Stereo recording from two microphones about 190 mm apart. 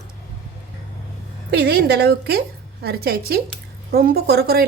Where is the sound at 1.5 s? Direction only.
60° right (ahead or behind).